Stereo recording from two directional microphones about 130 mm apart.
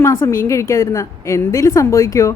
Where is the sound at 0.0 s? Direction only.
20° left (ahead or behind).